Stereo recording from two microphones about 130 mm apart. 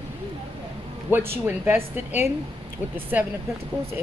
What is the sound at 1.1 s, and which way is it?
Speech, 15° right (ahead or behind).